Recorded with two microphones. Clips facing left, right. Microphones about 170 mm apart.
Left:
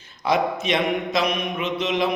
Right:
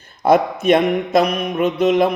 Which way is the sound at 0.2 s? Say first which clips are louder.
Right 8 dB; 50° right (ahead or behind).